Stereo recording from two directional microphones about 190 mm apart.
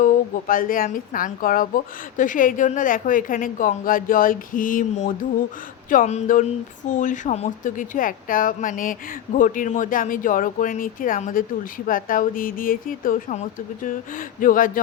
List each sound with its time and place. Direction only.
0.0 s speech: 45° left (ahead or behind)